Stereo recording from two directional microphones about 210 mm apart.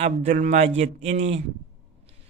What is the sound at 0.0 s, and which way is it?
A man's voice, 35° right (ahead or behind).